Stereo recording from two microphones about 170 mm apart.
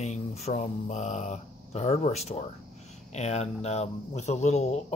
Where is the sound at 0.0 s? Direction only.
40° left (ahead or behind).